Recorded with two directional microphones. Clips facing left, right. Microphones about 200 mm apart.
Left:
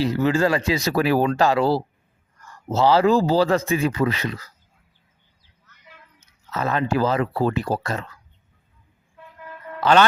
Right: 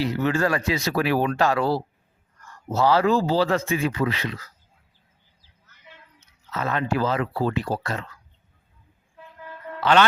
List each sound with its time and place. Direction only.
0.2 s speech: 30° left (ahead or behind)
1.3 s speech: 25° left (ahead or behind)
6.1 s speech: 40° left (ahead or behind)
9.8 s a man's voice: 40° left (ahead or behind)